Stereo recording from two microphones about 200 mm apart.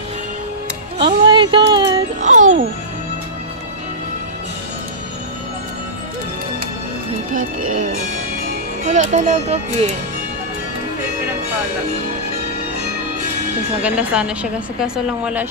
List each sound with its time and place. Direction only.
0.9 s music: 25° right (ahead or behind)
2.2 s a child's voice: 35° right (ahead or behind)
8.8 s speech: 35° right (ahead or behind)
13.8 s a woman's voice: 5° right (ahead or behind)